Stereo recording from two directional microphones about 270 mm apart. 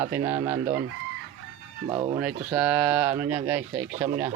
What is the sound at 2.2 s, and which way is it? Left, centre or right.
Speech, centre.